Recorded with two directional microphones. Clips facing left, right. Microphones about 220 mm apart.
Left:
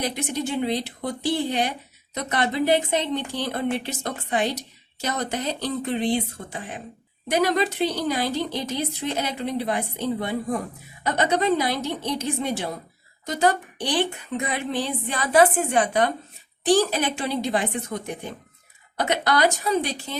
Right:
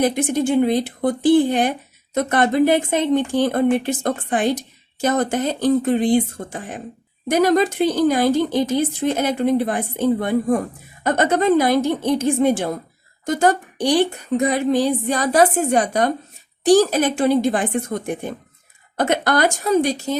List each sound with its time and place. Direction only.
0.0 s speech: 50° right (ahead or behind)